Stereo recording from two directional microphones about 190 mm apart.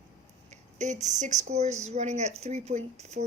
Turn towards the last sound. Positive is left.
turn(degrees=-35)  # may be behind; listen again after turning